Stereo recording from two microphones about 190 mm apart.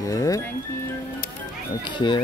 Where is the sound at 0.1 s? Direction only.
15° left (ahead or behind).